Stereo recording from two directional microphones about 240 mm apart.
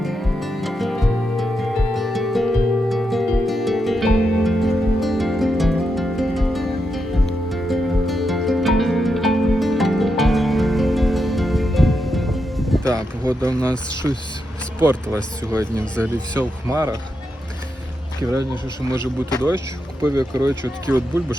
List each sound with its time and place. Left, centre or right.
0.0 s music: centre
13.4 s speech: centre
16.4 s speech: centre
18.9 s speech: centre
20.1 s speech: centre